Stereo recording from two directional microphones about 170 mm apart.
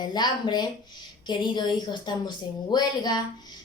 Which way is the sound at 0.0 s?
25° left (ahead or behind).